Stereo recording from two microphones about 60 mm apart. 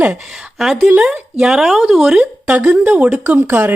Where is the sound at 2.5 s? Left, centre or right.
Right.